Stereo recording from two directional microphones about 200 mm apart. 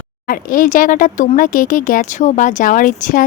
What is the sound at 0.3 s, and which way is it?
Speech, 45° left (ahead or behind).